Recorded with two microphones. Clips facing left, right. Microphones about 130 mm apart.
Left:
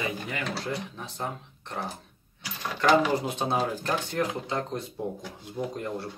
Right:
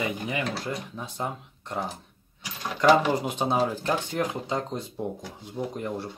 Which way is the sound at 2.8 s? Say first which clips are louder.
Right 2 dB; 15° right (ahead or behind).